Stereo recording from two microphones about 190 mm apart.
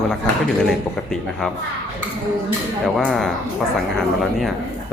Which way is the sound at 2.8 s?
Centre (ahead or behind).